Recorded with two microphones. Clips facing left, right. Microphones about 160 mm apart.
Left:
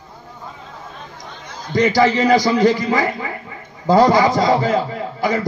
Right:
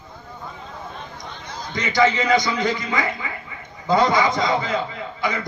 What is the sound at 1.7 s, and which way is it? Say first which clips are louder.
A man's voice: left 5 dB; 40° left (ahead or behind).